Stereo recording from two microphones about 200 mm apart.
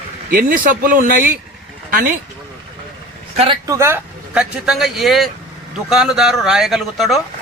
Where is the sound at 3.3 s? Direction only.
25° right (ahead or behind).